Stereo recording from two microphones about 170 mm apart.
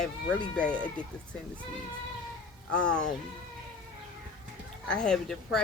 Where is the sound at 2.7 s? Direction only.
5° left (ahead or behind).